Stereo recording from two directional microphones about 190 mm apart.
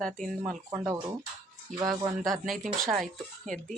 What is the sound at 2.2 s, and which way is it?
Speech, centre (ahead or behind).